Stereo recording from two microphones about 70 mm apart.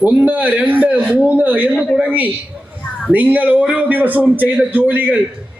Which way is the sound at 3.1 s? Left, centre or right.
Right.